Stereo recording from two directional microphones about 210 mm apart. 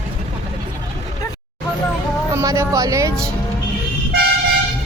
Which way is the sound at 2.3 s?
15° right (ahead or behind).